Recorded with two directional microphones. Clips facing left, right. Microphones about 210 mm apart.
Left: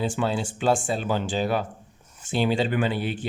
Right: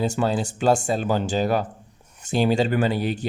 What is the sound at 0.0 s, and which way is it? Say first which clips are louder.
Speech: right 3 dB; 40° right (ahead or behind).